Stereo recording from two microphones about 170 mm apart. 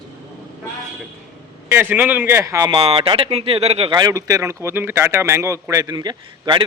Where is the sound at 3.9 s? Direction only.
20° right (ahead or behind).